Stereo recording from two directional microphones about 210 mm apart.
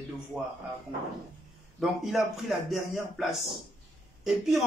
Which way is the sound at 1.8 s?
Centre (ahead or behind).